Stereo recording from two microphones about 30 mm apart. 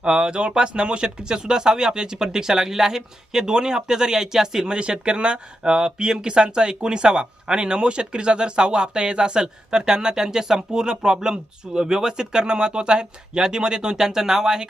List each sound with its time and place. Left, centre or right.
0.0 s speech: right
4.8 s speech: right